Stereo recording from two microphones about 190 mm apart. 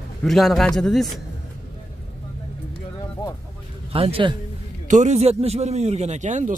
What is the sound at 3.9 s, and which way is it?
A man's voice, 30° right (ahead or behind).